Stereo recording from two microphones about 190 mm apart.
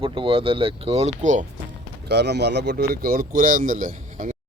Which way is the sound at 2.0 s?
60° right (ahead or behind).